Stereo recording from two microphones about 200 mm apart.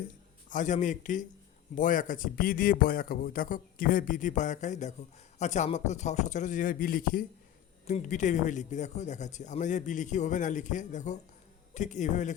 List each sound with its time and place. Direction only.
0.5 s speech: 40° left (ahead or behind)